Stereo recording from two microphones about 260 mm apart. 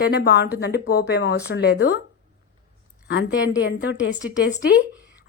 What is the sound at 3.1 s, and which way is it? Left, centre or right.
A woman's voice, left.